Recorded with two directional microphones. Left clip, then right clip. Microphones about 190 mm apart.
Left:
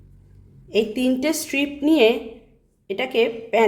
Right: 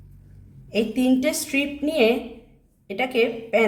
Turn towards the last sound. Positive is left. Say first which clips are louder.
# left 2 dB
turn(degrees=30)  # may be behind; listen again after turning